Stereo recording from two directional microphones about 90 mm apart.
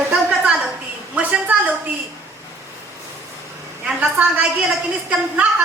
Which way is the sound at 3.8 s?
15° right (ahead or behind).